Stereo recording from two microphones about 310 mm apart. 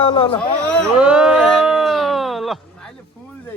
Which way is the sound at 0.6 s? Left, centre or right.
Centre.